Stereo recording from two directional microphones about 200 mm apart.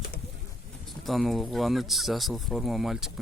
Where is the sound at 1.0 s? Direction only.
Centre (ahead or behind).